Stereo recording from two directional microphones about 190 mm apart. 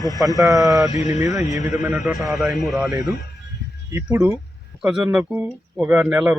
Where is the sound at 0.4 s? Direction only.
20° right (ahead or behind).